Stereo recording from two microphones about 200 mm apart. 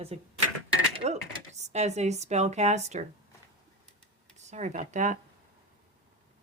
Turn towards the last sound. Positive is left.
turn(degrees=-40)  # may be behind; listen again after turning